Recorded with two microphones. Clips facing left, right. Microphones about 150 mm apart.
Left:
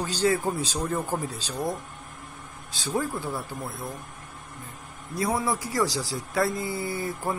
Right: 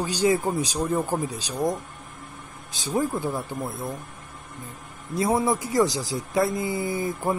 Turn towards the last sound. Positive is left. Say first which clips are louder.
# right 4 dB
turn(degrees=-20)  # may be behind; listen again after turning